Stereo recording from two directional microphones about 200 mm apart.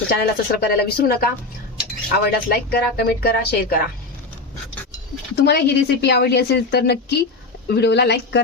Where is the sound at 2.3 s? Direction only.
50° left (ahead or behind).